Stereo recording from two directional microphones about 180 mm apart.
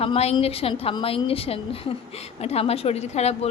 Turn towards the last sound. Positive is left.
turn(degrees=35)  # may be behind; listen again after turning